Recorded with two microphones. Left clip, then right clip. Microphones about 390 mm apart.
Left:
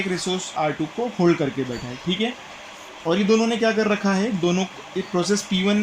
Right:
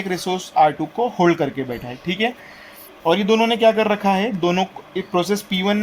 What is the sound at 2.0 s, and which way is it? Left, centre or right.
Speech, right.